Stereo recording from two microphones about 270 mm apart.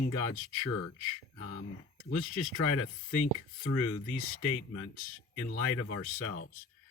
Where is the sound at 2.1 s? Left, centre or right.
Left.